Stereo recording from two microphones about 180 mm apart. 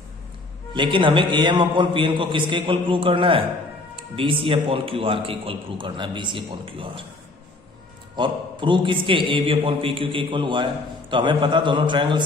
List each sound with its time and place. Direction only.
0.7 s a man's voice: 25° right (ahead or behind)
8.2 s a man's voice: 25° right (ahead or behind)